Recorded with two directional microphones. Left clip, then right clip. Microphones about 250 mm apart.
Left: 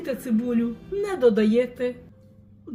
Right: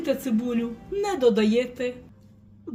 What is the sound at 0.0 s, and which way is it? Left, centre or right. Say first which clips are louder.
Speech: right 1 dB; centre.